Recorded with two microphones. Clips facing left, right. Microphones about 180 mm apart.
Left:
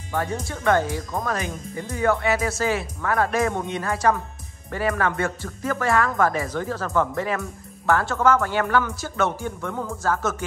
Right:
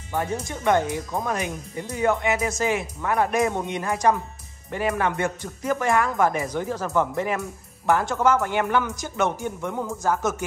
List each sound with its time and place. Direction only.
0.1 s speech: 15° right (ahead or behind)